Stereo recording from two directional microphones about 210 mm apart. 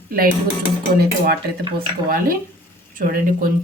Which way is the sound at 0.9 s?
45° right (ahead or behind).